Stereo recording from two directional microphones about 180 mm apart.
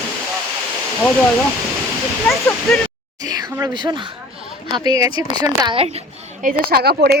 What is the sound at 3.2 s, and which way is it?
Speech, 20° right (ahead or behind).